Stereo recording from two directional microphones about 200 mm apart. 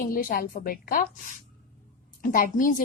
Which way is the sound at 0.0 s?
45° left (ahead or behind).